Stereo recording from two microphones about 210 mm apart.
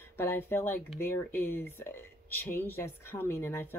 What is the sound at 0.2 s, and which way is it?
Speech, 10° left (ahead or behind).